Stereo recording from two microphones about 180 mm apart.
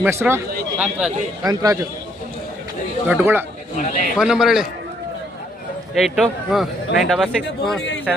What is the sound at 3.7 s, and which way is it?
Speech, 45° left (ahead or behind).